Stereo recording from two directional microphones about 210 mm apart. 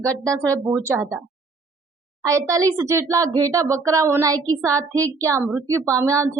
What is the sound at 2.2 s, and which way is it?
Speech, 15° right (ahead or behind).